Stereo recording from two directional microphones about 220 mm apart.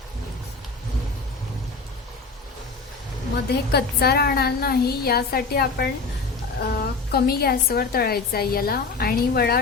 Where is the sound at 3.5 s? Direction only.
45° left (ahead or behind).